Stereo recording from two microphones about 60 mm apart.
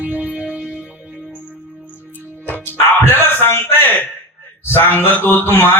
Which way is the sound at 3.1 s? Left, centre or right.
Left.